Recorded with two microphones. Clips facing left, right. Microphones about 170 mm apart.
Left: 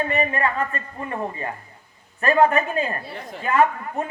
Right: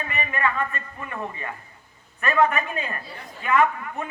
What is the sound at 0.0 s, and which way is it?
A man's voice, 35° left (ahead or behind).